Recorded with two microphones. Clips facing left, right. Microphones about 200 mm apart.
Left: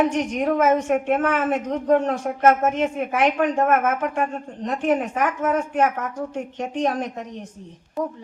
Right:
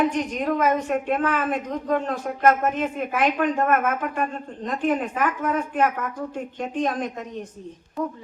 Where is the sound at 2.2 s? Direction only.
45° left (ahead or behind).